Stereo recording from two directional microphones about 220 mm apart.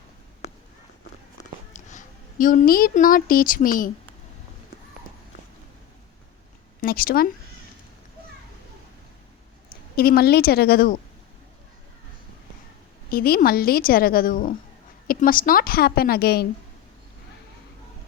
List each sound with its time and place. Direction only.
1.7 s a woman's voice: 35° left (ahead or behind)
6.8 s a woman's voice: 40° left (ahead or behind)
9.9 s a woman's voice: 45° left (ahead or behind)
13.1 s a woman's voice: 40° left (ahead or behind)